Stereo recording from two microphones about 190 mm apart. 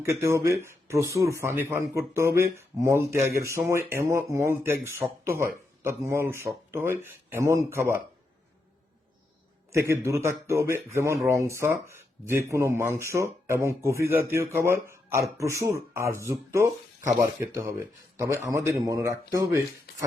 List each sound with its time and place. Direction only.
0.0 s speech: 15° right (ahead or behind)
9.7 s speech: 15° right (ahead or behind)
18.2 s speech: 15° right (ahead or behind)